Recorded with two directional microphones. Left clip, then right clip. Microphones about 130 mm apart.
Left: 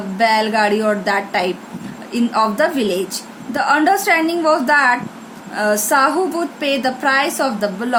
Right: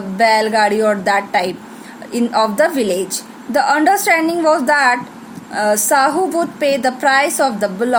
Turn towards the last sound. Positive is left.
turn(degrees=-50)  # may be behind; listen again after turning